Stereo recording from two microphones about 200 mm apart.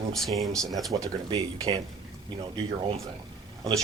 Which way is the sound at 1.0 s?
15° right (ahead or behind).